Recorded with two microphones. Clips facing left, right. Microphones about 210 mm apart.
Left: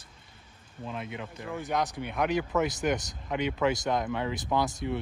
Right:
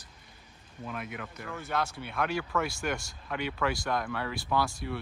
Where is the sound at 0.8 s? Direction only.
25° left (ahead or behind).